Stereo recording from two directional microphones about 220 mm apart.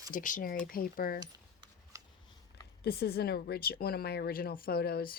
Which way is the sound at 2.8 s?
45° left (ahead or behind).